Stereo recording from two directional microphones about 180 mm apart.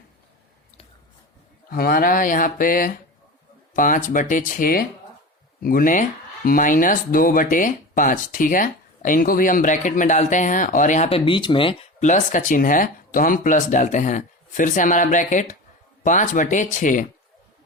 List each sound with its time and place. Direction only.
1.7 s speech: 55° left (ahead or behind)